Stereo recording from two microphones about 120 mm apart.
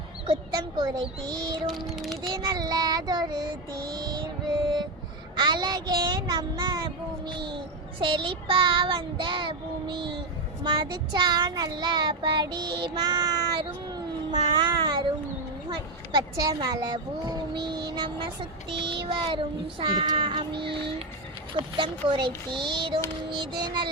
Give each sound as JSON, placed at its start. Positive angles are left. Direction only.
{"t": 0.3, "sound": "speech", "side_deg": -35}
{"t": 1.6, "sound": "a child's voice", "side_deg": 0}
{"t": 2.2, "sound": "speech", "side_deg": -35}
{"t": 5.4, "sound": "speech", "side_deg": -40}
{"t": 8.0, "sound": "child singing", "side_deg": -45}
{"t": 10.6, "sound": "speech", "side_deg": -40}
{"t": 13.9, "sound": "cat", "side_deg": -35}
{"t": 15.7, "sound": "speech", "side_deg": -35}
{"t": 18.9, "sound": "child singing", "side_deg": -45}
{"t": 21.5, "sound": "speech", "side_deg": -40}
{"t": 23.3, "sound": "child singing", "side_deg": -40}